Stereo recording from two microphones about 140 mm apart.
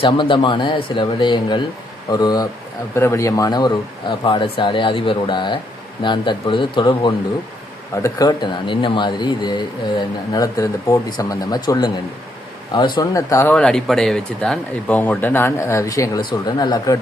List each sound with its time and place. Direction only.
0.0 s speech: 35° left (ahead or behind)
2.9 s speech: 20° left (ahead or behind)
4.1 s speech: 40° left (ahead or behind)
7.9 s speech: 25° left (ahead or behind)
13.5 s speech: 5° left (ahead or behind); by 17.0 s 25° left (ahead or behind)